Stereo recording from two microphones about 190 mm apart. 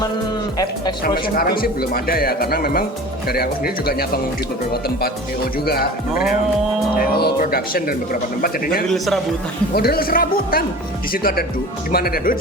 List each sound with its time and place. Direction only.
1.0 s speech: 55° left (ahead or behind)
6.9 s speech: 55° left (ahead or behind)